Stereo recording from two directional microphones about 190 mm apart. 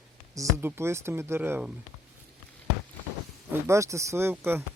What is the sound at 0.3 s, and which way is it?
Speech, 15° right (ahead or behind).